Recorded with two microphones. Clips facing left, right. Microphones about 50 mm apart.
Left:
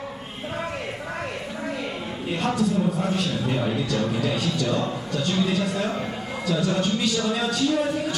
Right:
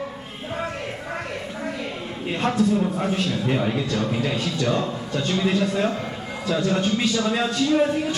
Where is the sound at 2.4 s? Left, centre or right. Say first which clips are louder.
Right 3 dB; right.